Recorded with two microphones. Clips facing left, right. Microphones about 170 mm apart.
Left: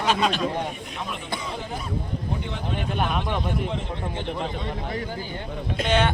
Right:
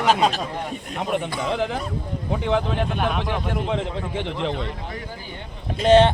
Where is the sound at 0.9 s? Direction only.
60° right (ahead or behind); by 4.5 s 90° right.